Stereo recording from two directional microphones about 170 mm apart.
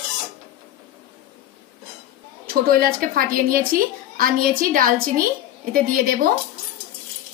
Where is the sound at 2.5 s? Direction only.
60° right (ahead or behind).